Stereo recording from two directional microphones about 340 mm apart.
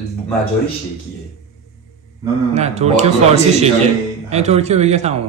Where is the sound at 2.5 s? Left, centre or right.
Centre.